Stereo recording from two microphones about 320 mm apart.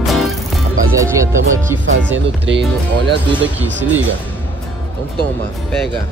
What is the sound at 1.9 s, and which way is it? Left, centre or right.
Speech, right.